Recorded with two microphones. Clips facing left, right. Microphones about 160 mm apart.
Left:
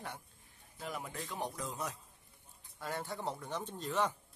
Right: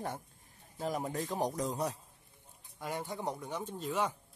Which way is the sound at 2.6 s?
15° right (ahead or behind).